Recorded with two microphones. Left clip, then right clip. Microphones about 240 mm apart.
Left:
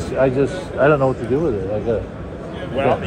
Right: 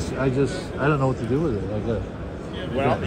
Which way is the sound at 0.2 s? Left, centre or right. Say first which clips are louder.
Left 7 dB; centre.